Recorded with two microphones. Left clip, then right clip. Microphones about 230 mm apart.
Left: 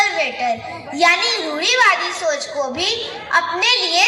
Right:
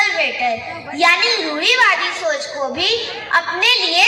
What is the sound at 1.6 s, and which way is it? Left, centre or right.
A woman's voice, left.